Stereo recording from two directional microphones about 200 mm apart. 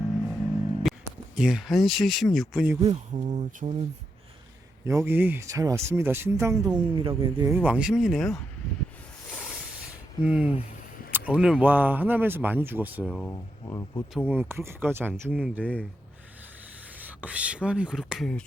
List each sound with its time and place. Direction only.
0.9 s a sound: centre (ahead or behind)
1.4 s speech: 5° right (ahead or behind)
2.8 s speech: 35° right (ahead or behind)
4.9 s speech: 15° right (ahead or behind)
6.8 s speech: 25° right (ahead or behind)
7.5 s speech: 5° right (ahead or behind)
10.2 s speech: 5° right (ahead or behind)
13.1 s speech: 10° left (ahead or behind)
14.3 s speech: 10° right (ahead or behind)
15.6 s speech: 5° left (ahead or behind)
17.0 s speech: 5° right (ahead or behind)